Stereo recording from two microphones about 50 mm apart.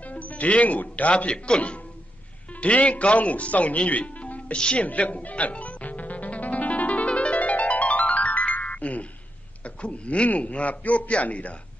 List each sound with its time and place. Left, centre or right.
0.1 s a man's voice: left
4.8 s music: left
9.8 s a man's voice: left